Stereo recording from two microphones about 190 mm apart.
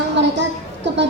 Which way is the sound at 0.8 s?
70° right (ahead or behind).